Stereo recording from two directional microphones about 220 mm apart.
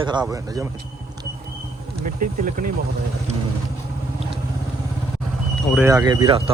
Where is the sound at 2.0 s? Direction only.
35° right (ahead or behind).